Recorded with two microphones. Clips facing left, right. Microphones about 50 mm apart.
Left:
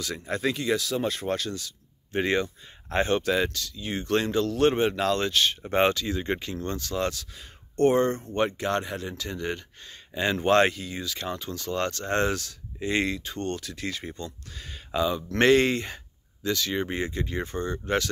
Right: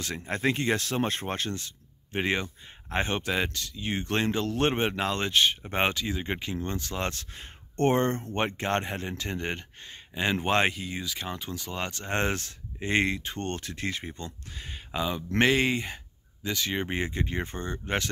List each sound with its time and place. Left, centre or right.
0.0 s speech: right
2.1 s speech: right
10.1 s speech: centre
16.4 s speech: right